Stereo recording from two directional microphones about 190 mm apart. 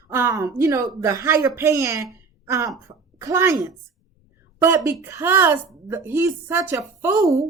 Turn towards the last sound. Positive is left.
turn(degrees=-15)  # may be behind; listen again after turning